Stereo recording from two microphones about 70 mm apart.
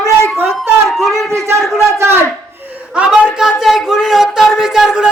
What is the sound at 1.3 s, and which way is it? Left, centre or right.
Speech, right.